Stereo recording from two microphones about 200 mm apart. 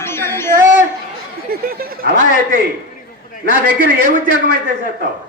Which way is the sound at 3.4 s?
45° left (ahead or behind).